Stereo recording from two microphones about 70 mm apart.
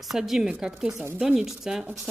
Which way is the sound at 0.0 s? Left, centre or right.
Centre.